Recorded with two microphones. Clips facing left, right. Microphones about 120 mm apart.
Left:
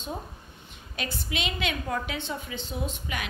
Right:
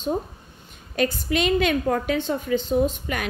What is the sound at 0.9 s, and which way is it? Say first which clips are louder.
A woman's voice: right 11 dB; 45° right (ahead or behind).